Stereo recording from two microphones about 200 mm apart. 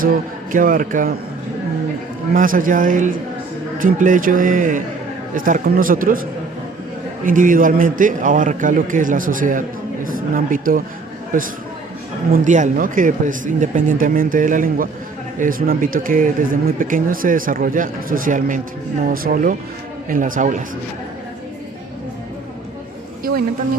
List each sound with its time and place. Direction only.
0.5 s speech: 45° right (ahead or behind)
2.3 s a man's voice: 45° right (ahead or behind)
7.3 s a man's voice: 40° right (ahead or behind)